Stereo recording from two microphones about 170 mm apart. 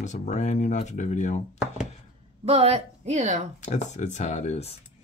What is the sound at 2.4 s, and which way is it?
Speech, 40° right (ahead or behind).